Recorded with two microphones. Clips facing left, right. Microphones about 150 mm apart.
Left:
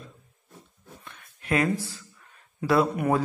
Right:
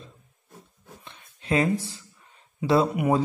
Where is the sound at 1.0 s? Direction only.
25° right (ahead or behind).